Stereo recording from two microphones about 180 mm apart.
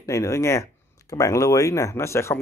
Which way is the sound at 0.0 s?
15° left (ahead or behind).